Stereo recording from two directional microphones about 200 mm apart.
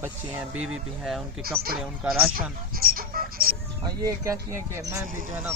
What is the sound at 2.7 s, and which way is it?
Music, 50° right (ahead or behind).